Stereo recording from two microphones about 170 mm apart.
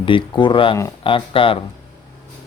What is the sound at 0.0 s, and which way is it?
Speech, 30° left (ahead or behind).